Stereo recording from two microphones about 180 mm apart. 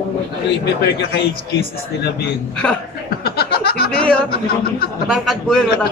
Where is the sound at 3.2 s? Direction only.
60° left (ahead or behind).